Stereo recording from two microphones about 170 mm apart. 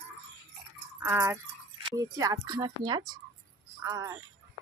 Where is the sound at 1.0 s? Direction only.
15° right (ahead or behind).